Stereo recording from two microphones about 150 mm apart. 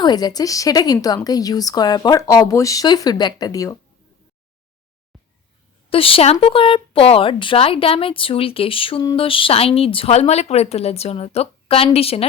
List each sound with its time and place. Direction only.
0.0 s speech: 25° left (ahead or behind)
5.9 s a woman's voice: 40° left (ahead or behind)